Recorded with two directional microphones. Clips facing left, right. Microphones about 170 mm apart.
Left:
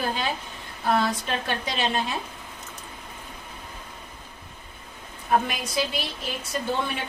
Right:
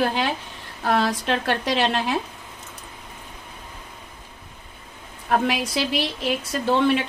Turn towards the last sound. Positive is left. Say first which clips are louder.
# right 8 dB
turn(degrees=-90)